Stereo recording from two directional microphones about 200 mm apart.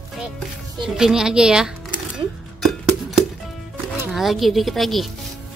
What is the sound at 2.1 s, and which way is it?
Music, centre (ahead or behind).